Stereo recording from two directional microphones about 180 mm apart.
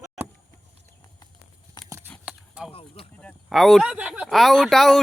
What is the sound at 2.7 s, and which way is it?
Speech, 30° left (ahead or behind).